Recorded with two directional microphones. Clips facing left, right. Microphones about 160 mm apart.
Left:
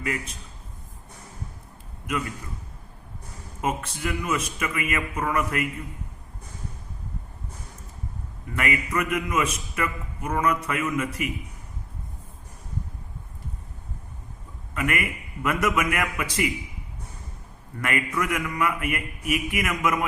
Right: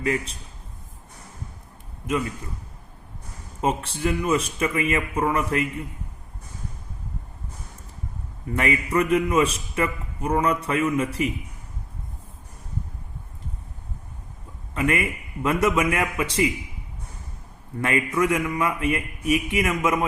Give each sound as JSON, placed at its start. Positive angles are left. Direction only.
{"t": 0.0, "sound": "a man's voice", "side_deg": -30}
{"t": 3.6, "sound": "a man's voice", "side_deg": -30}
{"t": 8.4, "sound": "a man's voice", "side_deg": -30}
{"t": 14.8, "sound": "a man's voice", "side_deg": -25}
{"t": 17.7, "sound": "a man's voice", "side_deg": -25}